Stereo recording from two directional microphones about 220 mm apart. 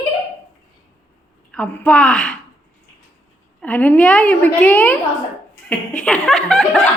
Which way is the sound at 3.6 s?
5° left (ahead or behind).